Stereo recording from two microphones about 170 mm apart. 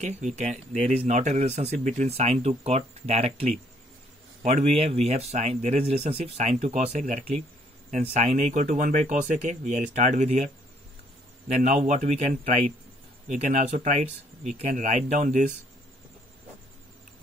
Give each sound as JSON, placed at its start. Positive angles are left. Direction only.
{"t": 0.0, "sound": "speech", "side_deg": -45}
{"t": 4.5, "sound": "speech", "side_deg": -40}
{"t": 11.5, "sound": "speech", "side_deg": -40}
{"t": 13.3, "sound": "speech", "side_deg": -45}